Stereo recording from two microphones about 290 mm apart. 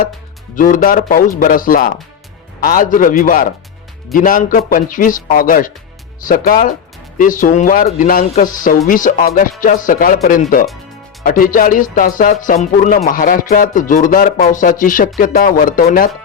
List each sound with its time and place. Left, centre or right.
0.5 s speech: left